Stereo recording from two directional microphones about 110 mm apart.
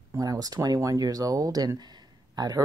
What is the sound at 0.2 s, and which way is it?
Speech, 35° right (ahead or behind).